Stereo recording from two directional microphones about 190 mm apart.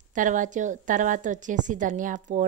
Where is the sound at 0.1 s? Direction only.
40° right (ahead or behind).